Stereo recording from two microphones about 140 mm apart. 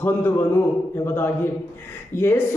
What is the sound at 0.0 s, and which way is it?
A man's voice, 15° left (ahead or behind).